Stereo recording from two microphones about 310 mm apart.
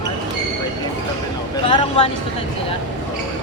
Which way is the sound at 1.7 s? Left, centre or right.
Centre.